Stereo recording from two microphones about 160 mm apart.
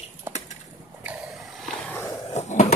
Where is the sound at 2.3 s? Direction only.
45° left (ahead or behind).